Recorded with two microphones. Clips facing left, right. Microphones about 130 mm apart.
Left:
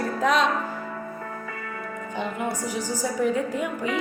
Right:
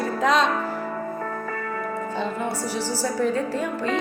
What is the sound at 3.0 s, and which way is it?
A woman's voice, 15° left (ahead or behind).